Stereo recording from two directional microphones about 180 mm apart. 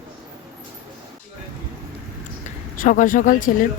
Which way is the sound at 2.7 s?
45° left (ahead or behind).